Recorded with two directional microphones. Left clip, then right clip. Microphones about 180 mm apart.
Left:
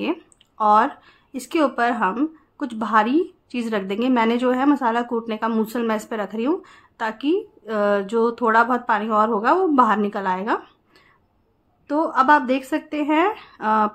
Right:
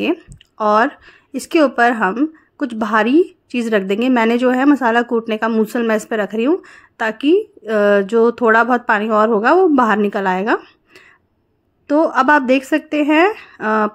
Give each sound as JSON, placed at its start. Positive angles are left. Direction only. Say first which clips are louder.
{"t": 0.0, "sound": "speech", "louder": "right 6 dB", "side_deg": -30}
{"t": 11.9, "sound": "speech", "louder": "right 4 dB", "side_deg": -35}